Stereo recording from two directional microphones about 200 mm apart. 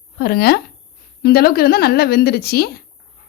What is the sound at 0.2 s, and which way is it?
A woman's voice, 50° left (ahead or behind).